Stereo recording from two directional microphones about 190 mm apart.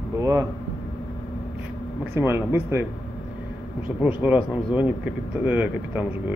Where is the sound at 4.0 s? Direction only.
5° right (ahead or behind).